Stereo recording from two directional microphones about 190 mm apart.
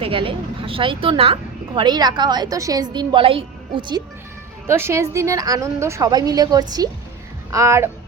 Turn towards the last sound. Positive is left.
turn(degrees=-15)  # may be behind; listen again after turning